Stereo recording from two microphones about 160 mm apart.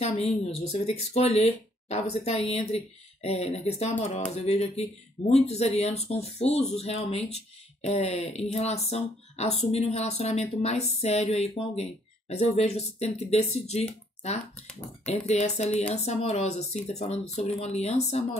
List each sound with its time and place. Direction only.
0.0 s speech: 40° left (ahead or behind)